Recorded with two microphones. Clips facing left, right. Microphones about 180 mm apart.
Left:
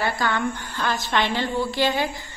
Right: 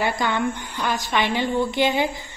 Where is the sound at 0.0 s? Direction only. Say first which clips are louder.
Right 1 dB; 20° right (ahead or behind).